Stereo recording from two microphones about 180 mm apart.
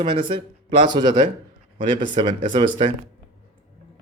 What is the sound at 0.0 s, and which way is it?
Speech, 30° right (ahead or behind).